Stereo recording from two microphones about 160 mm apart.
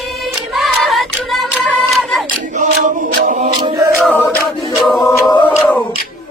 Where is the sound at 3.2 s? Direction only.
50° right (ahead or behind).